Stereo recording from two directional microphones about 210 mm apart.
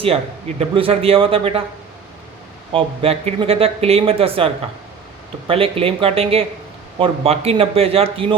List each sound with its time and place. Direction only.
0.0 s speech: 30° right (ahead or behind)
2.7 s speech: 30° right (ahead or behind)